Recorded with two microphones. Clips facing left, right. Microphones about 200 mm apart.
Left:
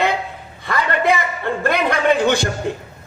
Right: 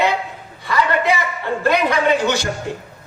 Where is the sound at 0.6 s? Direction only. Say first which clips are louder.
Right 1 dB; 55° left (ahead or behind).